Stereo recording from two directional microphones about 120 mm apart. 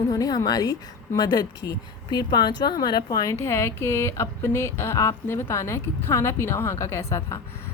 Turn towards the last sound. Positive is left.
turn(degrees=25)  # may be behind; listen again after turning